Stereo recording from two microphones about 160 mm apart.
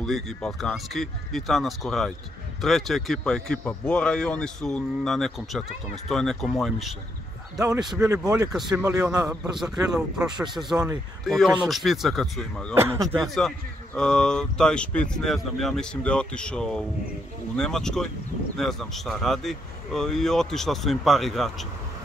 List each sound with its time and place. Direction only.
0.0 s speech: centre (ahead or behind)
8.0 s a man's voice: 5° right (ahead or behind)
8.7 s a man's voice: 20° right (ahead or behind); by 12.7 s 5° left (ahead or behind)
12.7 s a man's voice: 15° right (ahead or behind)
13.2 s speech: centre (ahead or behind)